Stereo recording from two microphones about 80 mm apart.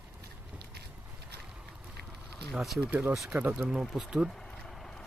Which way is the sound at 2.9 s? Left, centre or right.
Right.